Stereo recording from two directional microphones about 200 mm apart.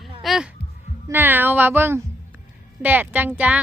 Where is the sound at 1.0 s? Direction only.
10° right (ahead or behind).